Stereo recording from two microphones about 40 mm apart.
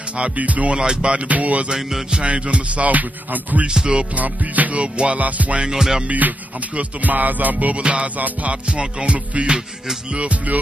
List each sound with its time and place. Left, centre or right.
0.2 s music: right
0.7 s music: right
1.3 s music: right
3.6 s music: centre
4.2 s music: right
4.9 s music: right
5.6 s music: centre
6.0 s music: right